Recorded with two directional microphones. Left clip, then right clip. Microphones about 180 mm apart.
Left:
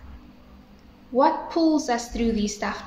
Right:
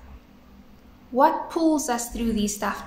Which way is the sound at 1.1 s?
20° right (ahead or behind).